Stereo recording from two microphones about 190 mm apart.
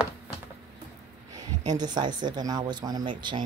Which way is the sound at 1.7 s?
20° right (ahead or behind).